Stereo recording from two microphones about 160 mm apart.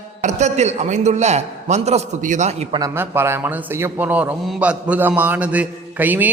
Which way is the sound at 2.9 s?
15° right (ahead or behind).